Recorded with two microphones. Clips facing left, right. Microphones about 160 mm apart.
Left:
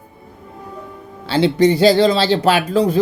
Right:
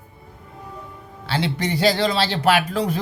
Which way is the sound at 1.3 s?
30° left (ahead or behind).